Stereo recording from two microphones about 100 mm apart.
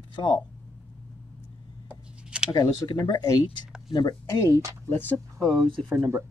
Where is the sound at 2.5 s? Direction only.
35° left (ahead or behind).